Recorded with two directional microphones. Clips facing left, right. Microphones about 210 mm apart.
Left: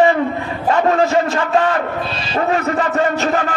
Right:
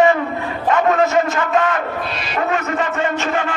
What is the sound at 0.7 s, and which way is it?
A man's voice, 30° left (ahead or behind).